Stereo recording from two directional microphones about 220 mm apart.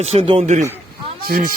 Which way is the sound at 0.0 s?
25° right (ahead or behind).